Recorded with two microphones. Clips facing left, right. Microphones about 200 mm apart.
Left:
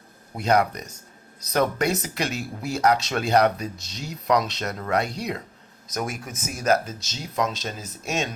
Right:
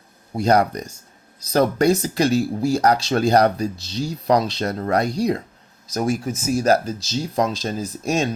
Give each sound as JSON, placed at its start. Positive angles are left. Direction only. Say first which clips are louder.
{"t": 0.3, "sound": "speech", "louder": "right 4 dB", "side_deg": -35}